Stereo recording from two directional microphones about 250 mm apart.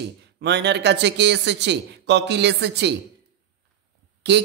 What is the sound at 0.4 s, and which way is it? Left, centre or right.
Speech, right.